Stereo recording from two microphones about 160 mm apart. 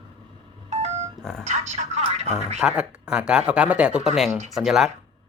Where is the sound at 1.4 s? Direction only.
45° right (ahead or behind).